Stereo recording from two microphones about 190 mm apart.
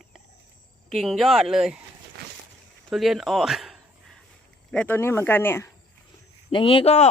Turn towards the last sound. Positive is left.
turn(degrees=35)  # may be behind; listen again after turning